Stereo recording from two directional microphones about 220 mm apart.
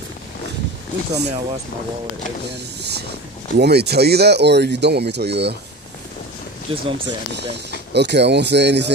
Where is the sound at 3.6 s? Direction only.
50° right (ahead or behind).